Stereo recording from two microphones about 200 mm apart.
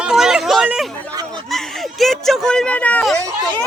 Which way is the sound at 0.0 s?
Centre (ahead or behind).